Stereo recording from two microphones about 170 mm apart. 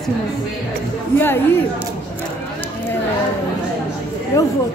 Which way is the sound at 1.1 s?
15° left (ahead or behind).